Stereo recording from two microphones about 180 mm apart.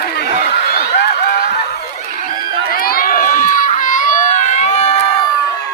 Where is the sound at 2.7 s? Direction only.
55° left (ahead or behind); by 5.0 s 40° left (ahead or behind).